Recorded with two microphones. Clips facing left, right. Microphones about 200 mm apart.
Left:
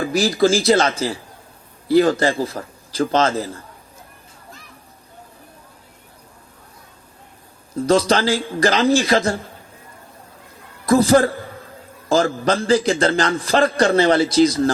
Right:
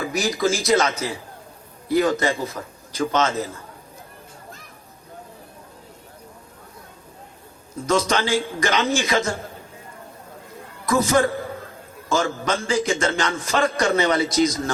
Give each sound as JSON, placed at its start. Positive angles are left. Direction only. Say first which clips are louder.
{"t": 0.0, "sound": "a man's voice", "louder": "left 5 dB", "side_deg": 30}
{"t": 7.8, "sound": "a man's voice", "louder": "left 5 dB", "side_deg": 35}
{"t": 10.8, "sound": "a man's voice", "louder": "left 5 dB", "side_deg": 35}